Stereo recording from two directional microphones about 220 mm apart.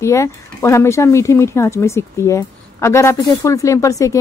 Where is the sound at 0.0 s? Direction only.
15° left (ahead or behind).